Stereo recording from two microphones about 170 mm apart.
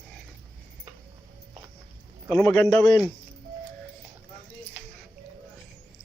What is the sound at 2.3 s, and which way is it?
Speech, 15° left (ahead or behind).